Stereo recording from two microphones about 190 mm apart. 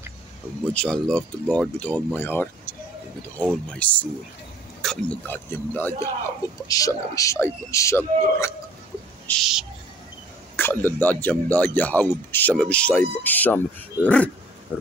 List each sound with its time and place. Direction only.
0.7 s speech: 5° left (ahead or behind)
9.3 s owl: centre (ahead or behind)
10.5 s speech: 10° left (ahead or behind)
14.7 s speech: 10° right (ahead or behind)